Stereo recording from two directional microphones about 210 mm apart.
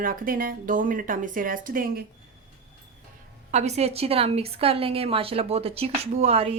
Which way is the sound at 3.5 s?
30° right (ahead or behind).